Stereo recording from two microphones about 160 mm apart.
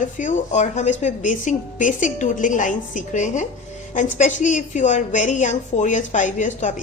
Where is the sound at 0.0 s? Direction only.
50° left (ahead or behind).